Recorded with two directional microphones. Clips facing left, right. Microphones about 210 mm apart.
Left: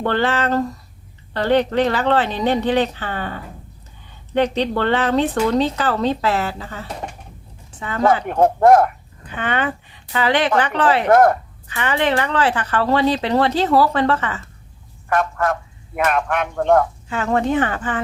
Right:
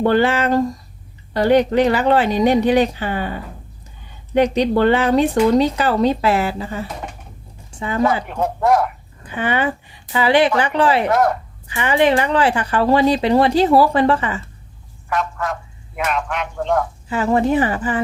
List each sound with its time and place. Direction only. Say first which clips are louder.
0.0 s speech: right 4 dB; 10° right (ahead or behind)
8.3 s speech: left 5 dB; 50° left (ahead or behind)
9.3 s speech: right 2 dB; 10° right (ahead or behind)
11.1 s speech: left 4 dB; 50° left (ahead or behind)
11.7 s speech: right 4 dB; 10° right (ahead or behind)
15.1 s a sound: left 3 dB; 50° left (ahead or behind)
16.0 s speech: left 3 dB; 50° left (ahead or behind)
17.1 s speech: right 7 dB; 10° right (ahead or behind)